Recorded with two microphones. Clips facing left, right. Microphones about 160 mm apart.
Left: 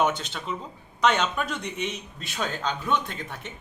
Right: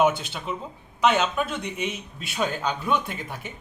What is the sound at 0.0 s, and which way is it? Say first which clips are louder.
Speech: right 3 dB; 5° right (ahead or behind).